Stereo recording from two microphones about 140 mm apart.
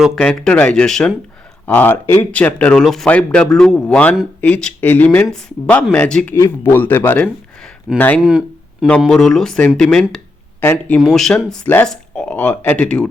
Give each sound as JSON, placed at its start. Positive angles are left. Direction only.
{"t": 0.2, "sound": "speech", "side_deg": 10}
{"t": 6.3, "sound": "speech", "side_deg": 20}
{"t": 8.2, "sound": "a sound", "side_deg": -5}
{"t": 9.0, "sound": "speech", "side_deg": 5}
{"t": 11.0, "sound": "speech", "side_deg": 0}